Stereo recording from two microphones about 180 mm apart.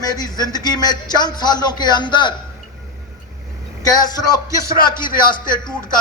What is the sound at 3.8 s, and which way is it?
Speech, 20° left (ahead or behind).